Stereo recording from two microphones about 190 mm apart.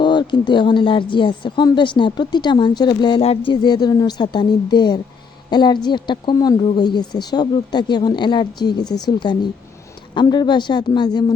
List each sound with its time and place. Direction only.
0.0 s speech: 25° left (ahead or behind)